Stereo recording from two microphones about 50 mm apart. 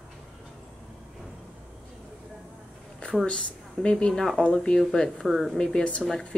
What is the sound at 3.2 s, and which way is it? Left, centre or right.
Speech, left.